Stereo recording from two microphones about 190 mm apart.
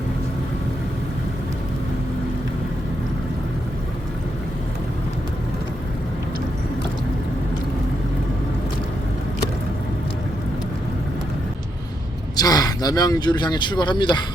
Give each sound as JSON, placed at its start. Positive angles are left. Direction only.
{"t": 12.4, "sound": "speech", "side_deg": 20}